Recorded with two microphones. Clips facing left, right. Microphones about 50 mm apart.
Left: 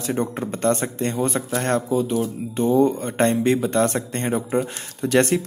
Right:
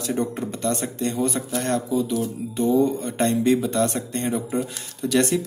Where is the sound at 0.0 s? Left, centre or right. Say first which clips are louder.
Left 1 dB; left.